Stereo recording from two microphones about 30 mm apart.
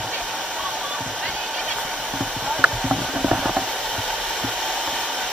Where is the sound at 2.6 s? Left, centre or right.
Right.